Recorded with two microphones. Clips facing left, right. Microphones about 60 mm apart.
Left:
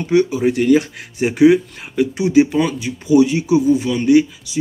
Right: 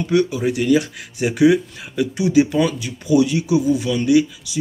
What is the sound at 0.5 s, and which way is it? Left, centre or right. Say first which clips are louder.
Speech: left 3 dB; left.